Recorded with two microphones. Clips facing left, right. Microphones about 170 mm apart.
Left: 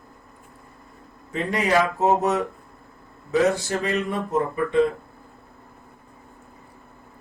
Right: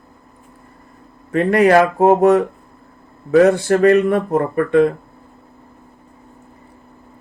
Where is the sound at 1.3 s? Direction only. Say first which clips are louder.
Right 10 dB; 60° right (ahead or behind).